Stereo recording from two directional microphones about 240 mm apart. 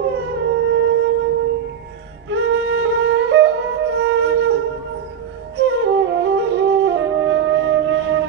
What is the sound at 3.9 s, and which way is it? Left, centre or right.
Flute, right.